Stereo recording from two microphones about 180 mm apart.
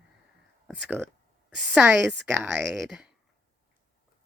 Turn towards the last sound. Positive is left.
turn(degrees=-5)  # may be behind; listen again after turning